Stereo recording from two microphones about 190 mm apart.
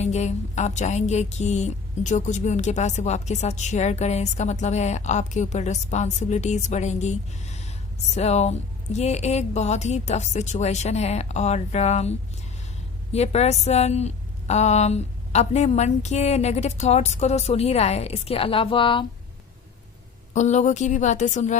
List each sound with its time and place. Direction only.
0.0 s music: 35° left (ahead or behind)
13.1 s music: 35° left (ahead or behind)
20.3 s music: 40° left (ahead or behind)